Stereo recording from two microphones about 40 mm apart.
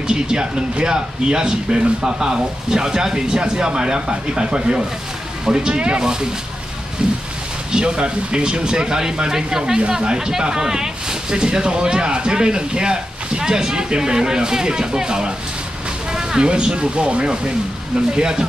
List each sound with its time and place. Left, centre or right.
0.0 s speech: centre
7.7 s speech: right